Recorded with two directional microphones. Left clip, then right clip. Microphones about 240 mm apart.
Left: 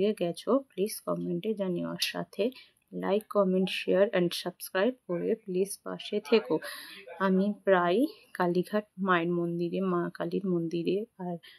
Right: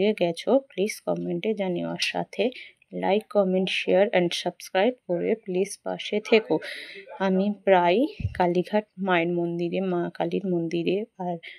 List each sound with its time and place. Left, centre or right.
0.0 s speech: centre